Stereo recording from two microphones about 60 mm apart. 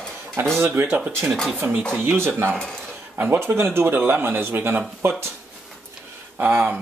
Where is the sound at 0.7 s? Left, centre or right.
Right.